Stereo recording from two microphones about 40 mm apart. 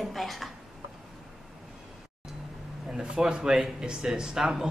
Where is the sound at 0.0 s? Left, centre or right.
Centre.